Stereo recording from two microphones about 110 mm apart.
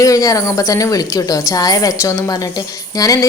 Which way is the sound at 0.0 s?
30° left (ahead or behind).